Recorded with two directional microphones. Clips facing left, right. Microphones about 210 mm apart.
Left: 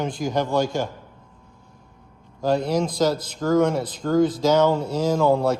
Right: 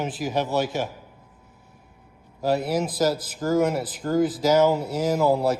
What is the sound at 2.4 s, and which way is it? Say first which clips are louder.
Speech: left 2 dB; 5° right (ahead or behind).